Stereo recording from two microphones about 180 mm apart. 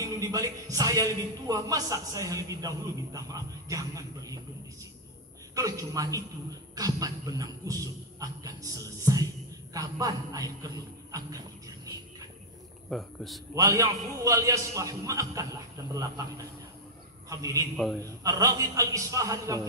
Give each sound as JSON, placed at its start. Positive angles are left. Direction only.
{"t": 0.0, "sound": "a man's voice", "side_deg": -20}
{"t": 5.5, "sound": "a man's voice", "side_deg": -20}
{"t": 12.9, "sound": "a man's voice", "side_deg": 0}
{"t": 13.6, "sound": "a man's voice", "side_deg": -20}
{"t": 17.3, "sound": "a man's voice", "side_deg": -20}